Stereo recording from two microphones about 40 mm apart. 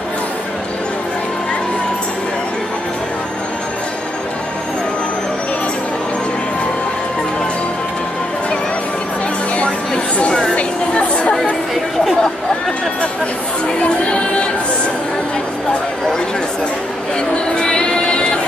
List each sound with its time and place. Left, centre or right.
10.5 s a sound: left
11.7 s chatter: centre
13.8 s music: left
17.6 s music: left